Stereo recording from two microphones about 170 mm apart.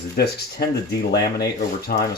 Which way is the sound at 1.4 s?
65° left (ahead or behind).